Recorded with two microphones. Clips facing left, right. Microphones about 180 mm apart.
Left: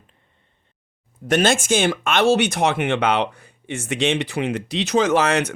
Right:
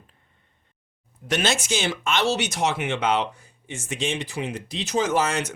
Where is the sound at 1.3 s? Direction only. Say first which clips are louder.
Left 6 dB; 50° left (ahead or behind).